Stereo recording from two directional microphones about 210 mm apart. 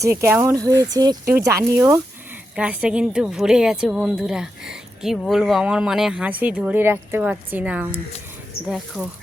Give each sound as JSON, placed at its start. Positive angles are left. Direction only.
{"t": 0.0, "sound": "a woman's voice", "side_deg": -10}